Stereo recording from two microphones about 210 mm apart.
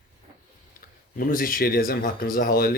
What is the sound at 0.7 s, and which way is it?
Speech, 40° left (ahead or behind).